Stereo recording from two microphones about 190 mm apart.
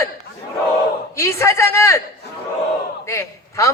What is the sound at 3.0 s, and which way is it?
Speech, 15° left (ahead or behind).